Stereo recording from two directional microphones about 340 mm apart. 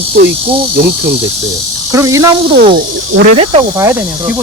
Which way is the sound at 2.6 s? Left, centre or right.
Right.